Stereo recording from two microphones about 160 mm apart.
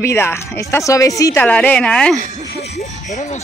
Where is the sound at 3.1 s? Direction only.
45° left (ahead or behind).